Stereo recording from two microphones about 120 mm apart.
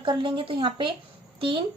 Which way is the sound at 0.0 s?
45° right (ahead or behind).